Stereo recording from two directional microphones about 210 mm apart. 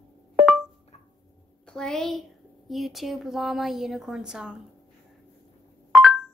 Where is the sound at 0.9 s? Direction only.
30° left (ahead or behind).